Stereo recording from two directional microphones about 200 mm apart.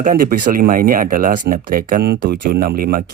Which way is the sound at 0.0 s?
45° right (ahead or behind).